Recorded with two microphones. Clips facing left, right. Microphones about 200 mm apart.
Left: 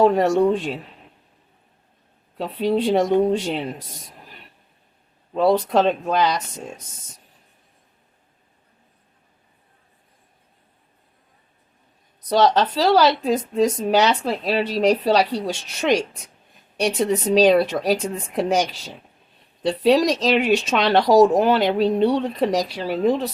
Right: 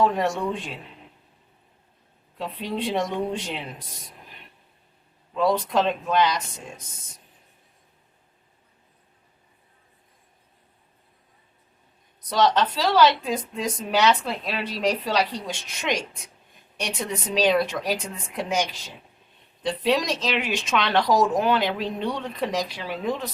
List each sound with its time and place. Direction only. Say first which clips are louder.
0.0 s speech: left 7 dB; 35° left (ahead or behind)
2.4 s speech: left 8 dB; 40° left (ahead or behind)
5.3 s speech: left 5 dB; 35° left (ahead or behind)
12.3 s speech: left 4 dB; 35° left (ahead or behind)